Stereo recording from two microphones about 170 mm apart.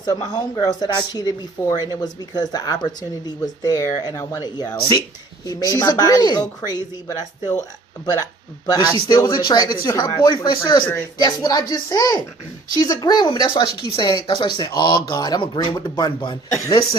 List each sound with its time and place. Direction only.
0.0 s speech: 25° left (ahead or behind)
8.7 s speech: 25° left (ahead or behind)